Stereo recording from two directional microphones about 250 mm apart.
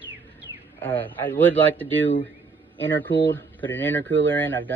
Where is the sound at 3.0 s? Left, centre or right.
Centre.